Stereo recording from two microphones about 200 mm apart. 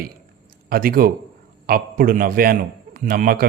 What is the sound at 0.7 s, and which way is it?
A man's voice, 45° right (ahead or behind).